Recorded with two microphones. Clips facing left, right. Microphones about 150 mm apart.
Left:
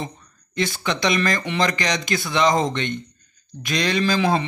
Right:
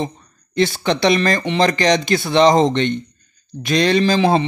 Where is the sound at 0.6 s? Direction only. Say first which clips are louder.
Right 7 dB; 30° right (ahead or behind).